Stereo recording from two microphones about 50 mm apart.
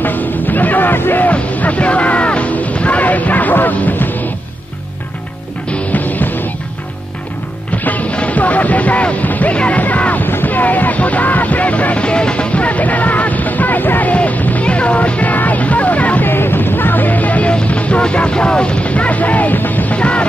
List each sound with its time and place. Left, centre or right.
0.0 s music: left
5.7 s music: left
7.8 s music: left
10.2 s a sound: left
16.3 s music: left
20.0 s music: left